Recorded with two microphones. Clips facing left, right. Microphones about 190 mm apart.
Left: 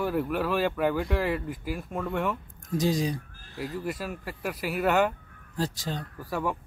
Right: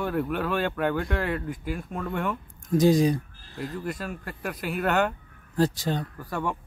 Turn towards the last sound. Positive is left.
turn(degrees=5)  # may be behind; listen again after turning